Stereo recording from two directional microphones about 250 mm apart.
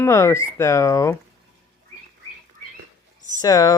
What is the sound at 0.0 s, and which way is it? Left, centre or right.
Speech, centre.